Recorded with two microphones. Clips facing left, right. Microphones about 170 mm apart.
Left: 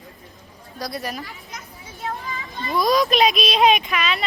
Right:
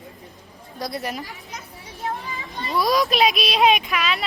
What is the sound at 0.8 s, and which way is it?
Speech, 25° right (ahead or behind).